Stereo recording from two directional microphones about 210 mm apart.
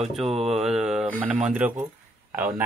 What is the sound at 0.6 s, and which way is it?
Speech, 5° right (ahead or behind).